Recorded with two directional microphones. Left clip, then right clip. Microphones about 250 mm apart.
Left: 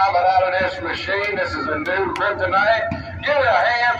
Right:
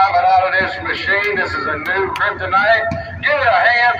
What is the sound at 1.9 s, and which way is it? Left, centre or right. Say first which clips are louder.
A man's voice: right 3 dB; centre.